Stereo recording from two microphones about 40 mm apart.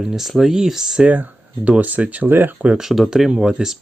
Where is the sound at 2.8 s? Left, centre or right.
Centre.